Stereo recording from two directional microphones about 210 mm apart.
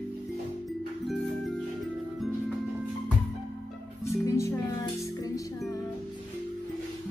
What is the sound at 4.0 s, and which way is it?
Music, 15° left (ahead or behind).